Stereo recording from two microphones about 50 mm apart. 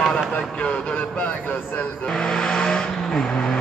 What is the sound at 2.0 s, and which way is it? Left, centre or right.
Vehicle, centre.